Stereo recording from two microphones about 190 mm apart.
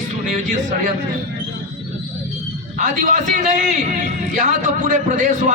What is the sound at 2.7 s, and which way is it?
A man's voice, 40° right (ahead or behind).